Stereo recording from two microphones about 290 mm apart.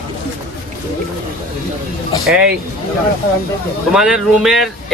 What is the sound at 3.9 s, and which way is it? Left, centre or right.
Speech, centre.